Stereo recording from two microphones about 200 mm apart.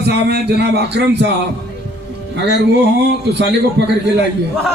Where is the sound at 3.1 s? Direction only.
60° right (ahead or behind).